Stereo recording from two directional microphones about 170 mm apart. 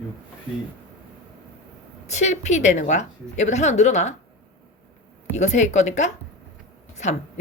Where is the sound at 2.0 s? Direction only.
45° left (ahead or behind).